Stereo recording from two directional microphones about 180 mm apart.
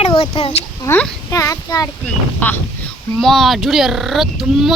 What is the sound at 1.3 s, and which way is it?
Child singing, 20° left (ahead or behind).